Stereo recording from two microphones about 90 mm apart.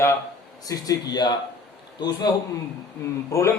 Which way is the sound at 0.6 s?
45° left (ahead or behind).